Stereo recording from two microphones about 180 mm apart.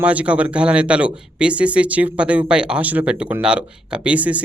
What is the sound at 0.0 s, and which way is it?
A man's voice, 5° right (ahead or behind).